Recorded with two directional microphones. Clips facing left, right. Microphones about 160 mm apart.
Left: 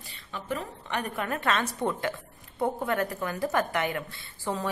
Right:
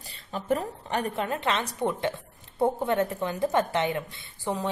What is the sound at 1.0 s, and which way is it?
Speech, 25° right (ahead or behind).